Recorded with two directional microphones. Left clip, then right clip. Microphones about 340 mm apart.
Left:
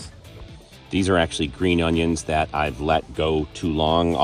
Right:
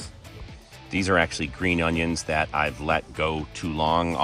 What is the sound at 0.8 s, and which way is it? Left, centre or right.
Speech, centre.